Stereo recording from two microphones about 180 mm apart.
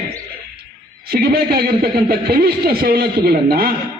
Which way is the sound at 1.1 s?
60° right (ahead or behind).